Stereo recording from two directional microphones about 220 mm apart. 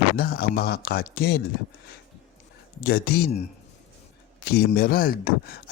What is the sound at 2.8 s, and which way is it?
Speech, 45° left (ahead or behind).